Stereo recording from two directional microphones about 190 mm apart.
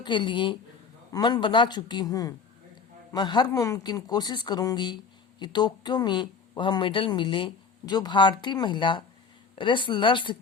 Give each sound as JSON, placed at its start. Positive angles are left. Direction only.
{"t": 0.0, "sound": "speech", "side_deg": 25}